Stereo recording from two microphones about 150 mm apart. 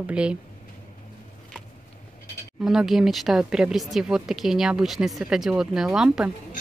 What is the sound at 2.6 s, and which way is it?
Speech, 5° right (ahead or behind).